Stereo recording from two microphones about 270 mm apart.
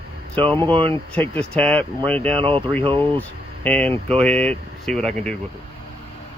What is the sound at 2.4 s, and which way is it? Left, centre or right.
Speech, centre.